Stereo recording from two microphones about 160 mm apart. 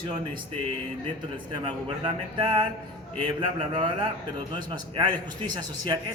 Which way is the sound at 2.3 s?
30° right (ahead or behind).